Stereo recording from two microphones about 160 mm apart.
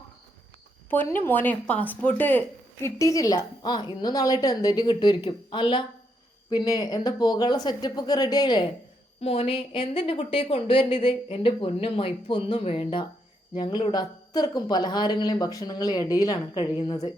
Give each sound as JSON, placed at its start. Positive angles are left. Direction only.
{"t": 0.9, "sound": "speech", "side_deg": 15}
{"t": 9.2, "sound": "speech", "side_deg": 40}